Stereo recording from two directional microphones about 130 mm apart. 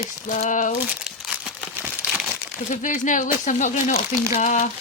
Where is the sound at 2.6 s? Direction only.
75° left (ahead or behind).